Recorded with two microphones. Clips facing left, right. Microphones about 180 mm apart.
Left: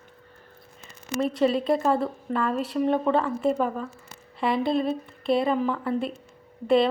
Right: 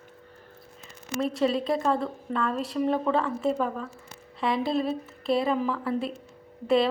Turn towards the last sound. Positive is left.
turn(degrees=0)  # may be behind; listen again after turning